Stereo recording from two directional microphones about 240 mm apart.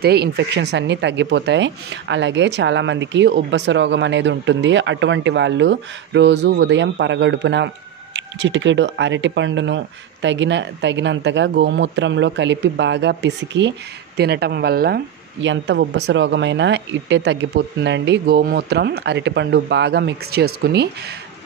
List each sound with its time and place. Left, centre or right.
0.0 s speech: right